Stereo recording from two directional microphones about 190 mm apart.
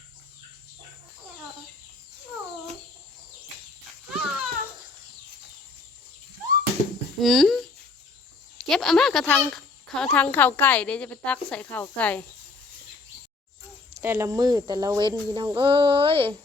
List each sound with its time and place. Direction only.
4.1 s a sound: 5° right (ahead or behind)
7.2 s speech: centre (ahead or behind)
8.6 s speech: centre (ahead or behind)
13.9 s a woman's voice: 15° right (ahead or behind)